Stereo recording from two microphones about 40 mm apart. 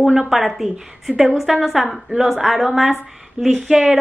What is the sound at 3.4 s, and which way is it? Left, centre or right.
Speech, right.